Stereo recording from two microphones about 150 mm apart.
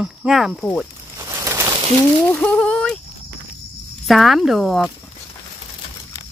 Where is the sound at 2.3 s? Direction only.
5° left (ahead or behind).